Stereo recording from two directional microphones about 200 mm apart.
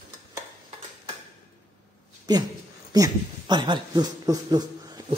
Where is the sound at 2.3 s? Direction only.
20° right (ahead or behind).